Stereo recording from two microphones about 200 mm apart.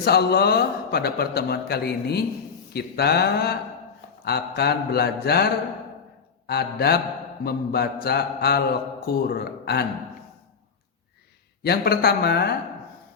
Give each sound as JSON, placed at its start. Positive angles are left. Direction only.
{"t": 0.0, "sound": "a man's voice", "side_deg": 55}
{"t": 6.5, "sound": "a man's voice", "side_deg": 50}
{"t": 11.6, "sound": "a man's voice", "side_deg": 50}